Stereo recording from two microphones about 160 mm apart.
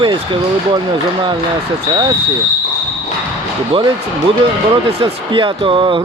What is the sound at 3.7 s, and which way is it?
Speech, 35° right (ahead or behind).